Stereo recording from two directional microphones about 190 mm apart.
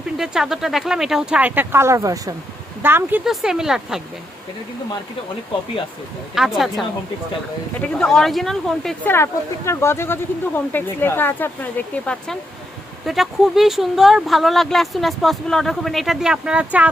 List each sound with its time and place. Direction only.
0.2 s speech: centre (ahead or behind)
6.3 s speech: centre (ahead or behind)
9.1 s speech: 15° left (ahead or behind); by 16.9 s 5° right (ahead or behind)